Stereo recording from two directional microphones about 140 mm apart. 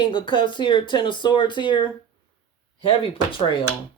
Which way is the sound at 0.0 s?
35° left (ahead or behind).